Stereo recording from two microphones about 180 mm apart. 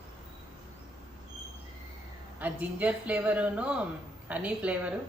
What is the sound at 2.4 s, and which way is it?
Speech, 10° right (ahead or behind).